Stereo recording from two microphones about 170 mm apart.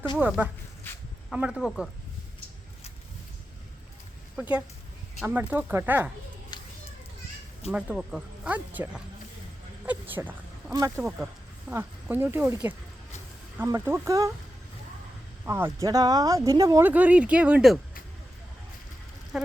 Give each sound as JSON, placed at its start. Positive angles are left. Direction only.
{"t": 0.2, "sound": "speech", "side_deg": -10}
{"t": 4.4, "sound": "speech", "side_deg": -5}
{"t": 6.5, "sound": "children playing", "side_deg": 25}
{"t": 7.7, "sound": "speech", "side_deg": -5}
{"t": 15.4, "sound": "speech", "side_deg": -15}
{"t": 16.9, "sound": "speech", "side_deg": -10}